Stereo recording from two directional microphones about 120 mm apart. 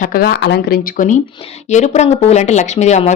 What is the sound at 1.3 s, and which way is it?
Speech, 55° left (ahead or behind).